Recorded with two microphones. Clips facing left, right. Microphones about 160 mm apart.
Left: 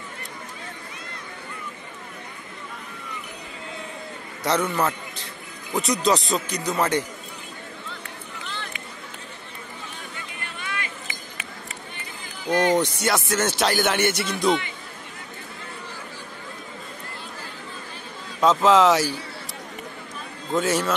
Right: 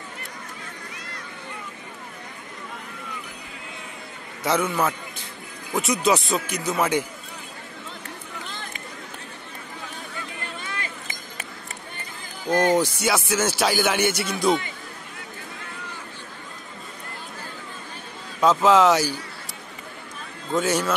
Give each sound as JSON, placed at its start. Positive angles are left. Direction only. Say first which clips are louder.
{"t": 4.4, "sound": "speech", "louder": "even", "side_deg": 0}
{"t": 8.5, "sound": "a sound", "louder": "left 2 dB", "side_deg": -45}
{"t": 10.6, "sound": "run", "louder": "left 1 dB", "side_deg": -35}
{"t": 12.7, "sound": "speech", "louder": "even", "side_deg": 0}
{"t": 18.4, "sound": "speech", "louder": "even", "side_deg": 0}
{"t": 20.5, "sound": "speech", "louder": "even", "side_deg": 0}